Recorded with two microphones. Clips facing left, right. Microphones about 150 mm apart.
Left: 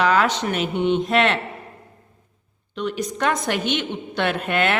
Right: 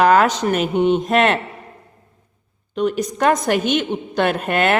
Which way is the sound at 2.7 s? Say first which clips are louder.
Right 6 dB; 45° right (ahead or behind).